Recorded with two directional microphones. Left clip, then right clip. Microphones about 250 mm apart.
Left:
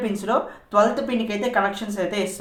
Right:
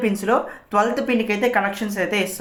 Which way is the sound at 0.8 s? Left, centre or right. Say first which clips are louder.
Even; right.